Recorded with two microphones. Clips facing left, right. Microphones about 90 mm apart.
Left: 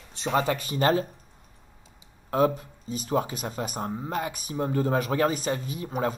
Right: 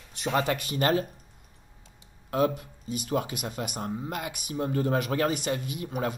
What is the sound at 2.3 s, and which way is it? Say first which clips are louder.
Speech: left 2 dB; 35° left (ahead or behind).